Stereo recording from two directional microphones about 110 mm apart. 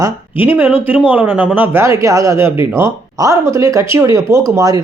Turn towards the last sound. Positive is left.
turn(degrees=-30)  # may be behind; listen again after turning